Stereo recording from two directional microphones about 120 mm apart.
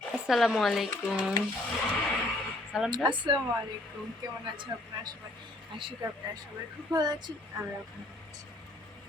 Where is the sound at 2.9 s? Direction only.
40° right (ahead or behind).